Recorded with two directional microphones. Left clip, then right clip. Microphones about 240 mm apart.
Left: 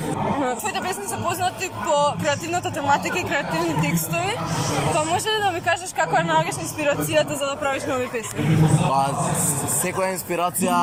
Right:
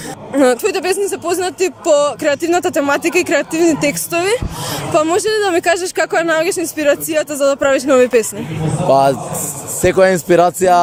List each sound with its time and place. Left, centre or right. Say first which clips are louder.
0.3 s speech: right 11 dB; right